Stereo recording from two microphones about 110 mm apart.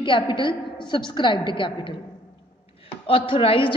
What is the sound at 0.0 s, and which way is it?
A woman's voice, 45° left (ahead or behind).